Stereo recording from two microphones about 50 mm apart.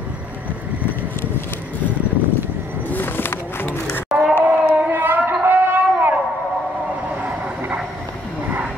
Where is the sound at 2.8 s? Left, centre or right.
Left.